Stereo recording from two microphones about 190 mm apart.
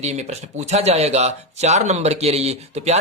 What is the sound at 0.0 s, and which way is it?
Speech, 35° right (ahead or behind).